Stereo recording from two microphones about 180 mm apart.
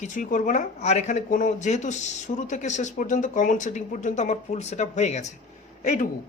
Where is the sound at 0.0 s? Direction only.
45° left (ahead or behind).